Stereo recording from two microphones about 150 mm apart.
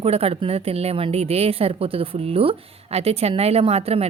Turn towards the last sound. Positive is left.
turn(degrees=-40)  # may be behind; listen again after turning